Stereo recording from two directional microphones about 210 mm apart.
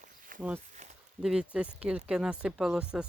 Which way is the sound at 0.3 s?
40° right (ahead or behind).